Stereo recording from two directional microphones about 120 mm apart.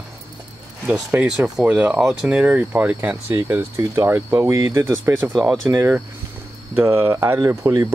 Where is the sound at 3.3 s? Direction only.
20° right (ahead or behind).